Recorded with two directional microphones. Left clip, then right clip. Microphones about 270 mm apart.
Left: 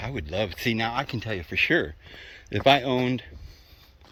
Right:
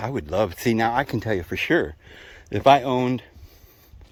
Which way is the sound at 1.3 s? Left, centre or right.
Right.